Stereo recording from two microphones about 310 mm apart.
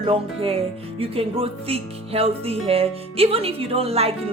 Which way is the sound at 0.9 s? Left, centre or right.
Centre.